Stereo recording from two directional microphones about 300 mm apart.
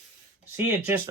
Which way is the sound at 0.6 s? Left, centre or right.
Centre.